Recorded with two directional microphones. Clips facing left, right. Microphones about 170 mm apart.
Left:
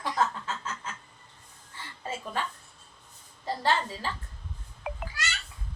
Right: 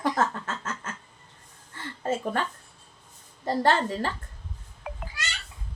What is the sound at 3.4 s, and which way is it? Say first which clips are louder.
Speech: right 5 dB; 55° right (ahead or behind).